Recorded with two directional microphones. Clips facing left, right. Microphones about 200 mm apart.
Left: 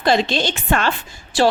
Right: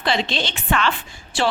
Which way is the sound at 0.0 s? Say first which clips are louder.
Left 5 dB; 45° left (ahead or behind).